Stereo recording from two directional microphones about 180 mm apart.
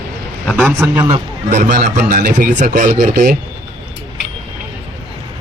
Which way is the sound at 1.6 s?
45° right (ahead or behind).